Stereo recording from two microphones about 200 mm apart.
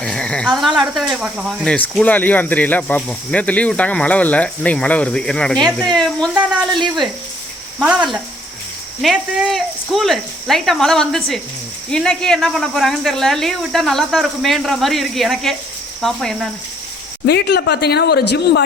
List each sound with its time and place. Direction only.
0.0 s cricket: 5° left (ahead or behind)
0.8 s speech: centre (ahead or behind)
9.0 s speech: centre (ahead or behind)
17.2 s speech: 55° left (ahead or behind)